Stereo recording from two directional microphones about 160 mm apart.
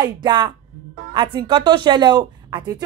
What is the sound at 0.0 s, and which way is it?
Speech, 25° right (ahead or behind).